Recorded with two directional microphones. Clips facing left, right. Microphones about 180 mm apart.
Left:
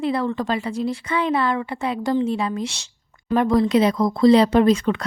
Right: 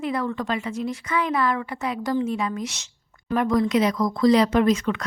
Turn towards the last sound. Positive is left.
turn(degrees=30)  # may be behind; listen again after turning